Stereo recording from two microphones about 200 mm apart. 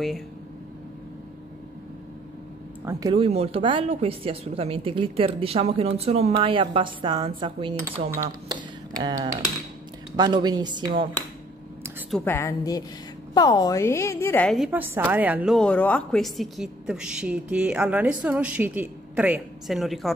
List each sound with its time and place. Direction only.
2.8 s a woman's voice: 15° right (ahead or behind)
8.5 s tick: 20° right (ahead or behind)
10.1 s a woman's voice: 20° right (ahead or behind)
12.1 s a woman's voice: 10° left (ahead or behind)
14.7 s a woman's voice: 10° right (ahead or behind)